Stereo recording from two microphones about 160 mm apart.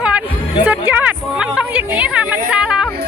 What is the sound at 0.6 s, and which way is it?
Music, 10° right (ahead or behind).